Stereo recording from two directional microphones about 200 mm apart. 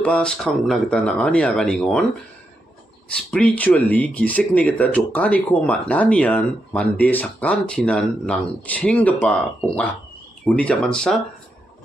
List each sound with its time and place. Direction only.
0.0 s speech: 5° left (ahead or behind)
3.1 s speech: 5° left (ahead or behind)